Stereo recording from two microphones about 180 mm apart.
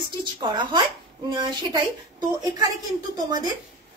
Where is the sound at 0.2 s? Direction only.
25° right (ahead or behind).